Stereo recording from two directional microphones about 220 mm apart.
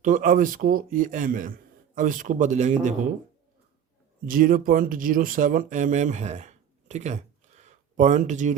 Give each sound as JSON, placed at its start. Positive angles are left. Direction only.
{"t": 0.0, "sound": "speech", "side_deg": -35}
{"t": 4.3, "sound": "speech", "side_deg": -40}